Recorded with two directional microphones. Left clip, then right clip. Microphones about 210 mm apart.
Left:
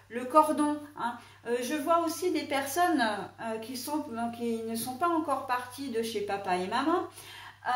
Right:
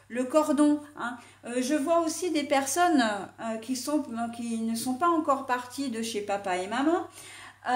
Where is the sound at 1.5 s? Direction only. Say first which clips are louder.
Right 2 dB; 50° right (ahead or behind).